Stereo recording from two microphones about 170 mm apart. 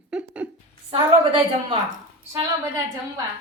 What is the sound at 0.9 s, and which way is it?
Speech, 30° right (ahead or behind).